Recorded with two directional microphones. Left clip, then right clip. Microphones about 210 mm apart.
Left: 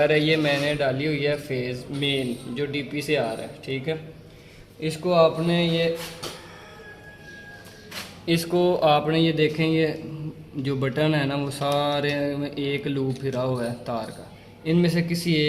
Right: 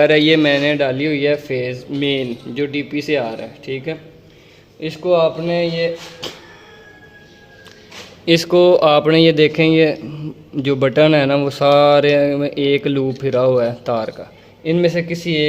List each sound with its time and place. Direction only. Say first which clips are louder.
0.0 s a man's voice: right 8 dB; 55° right (ahead or behind); by 5.8 s 35° right (ahead or behind)
8.2 s a man's voice: right 11 dB; 45° right (ahead or behind)